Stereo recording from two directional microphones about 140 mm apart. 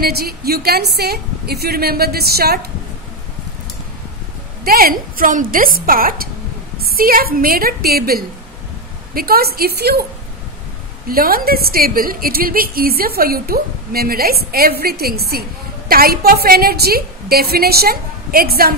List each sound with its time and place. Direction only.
0.0 s a woman's voice: 90° right
4.6 s a woman's voice: 90° right
11.1 s a woman's voice: 90° right